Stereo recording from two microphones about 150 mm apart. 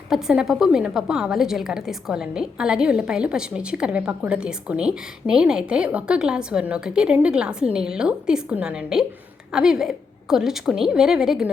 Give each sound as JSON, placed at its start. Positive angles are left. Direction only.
{"t": 0.1, "sound": "a woman's voice", "side_deg": -5}